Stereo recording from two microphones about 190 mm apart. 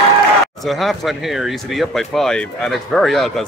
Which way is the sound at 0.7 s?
Centre (ahead or behind).